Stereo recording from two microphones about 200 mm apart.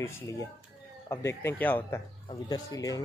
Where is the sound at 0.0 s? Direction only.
15° left (ahead or behind).